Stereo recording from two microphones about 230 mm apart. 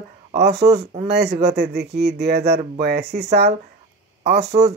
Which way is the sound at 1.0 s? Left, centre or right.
Right.